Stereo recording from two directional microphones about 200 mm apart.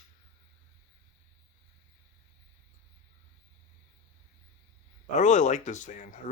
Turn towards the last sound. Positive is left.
turn(degrees=40)  # may be behind; listen again after turning